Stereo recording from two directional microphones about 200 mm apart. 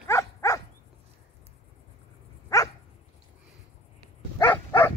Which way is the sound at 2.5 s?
15° left (ahead or behind).